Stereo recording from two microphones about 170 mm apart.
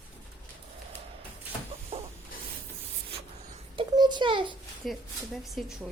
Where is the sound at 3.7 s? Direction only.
25° right (ahead or behind).